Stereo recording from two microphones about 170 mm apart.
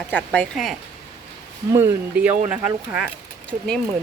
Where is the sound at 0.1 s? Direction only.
10° left (ahead or behind).